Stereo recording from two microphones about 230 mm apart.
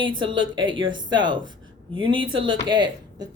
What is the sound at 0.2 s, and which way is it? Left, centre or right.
A woman's voice, right.